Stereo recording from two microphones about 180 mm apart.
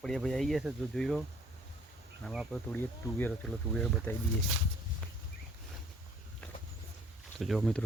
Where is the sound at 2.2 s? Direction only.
5° left (ahead or behind).